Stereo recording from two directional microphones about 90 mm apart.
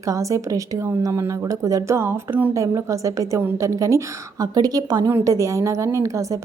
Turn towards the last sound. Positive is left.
turn(degrees=-35)  # may be behind; listen again after turning